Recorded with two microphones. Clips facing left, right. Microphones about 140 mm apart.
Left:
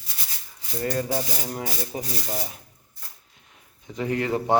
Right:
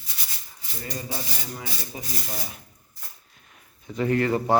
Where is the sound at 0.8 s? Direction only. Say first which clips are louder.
Left 8 dB; 55° left (ahead or behind).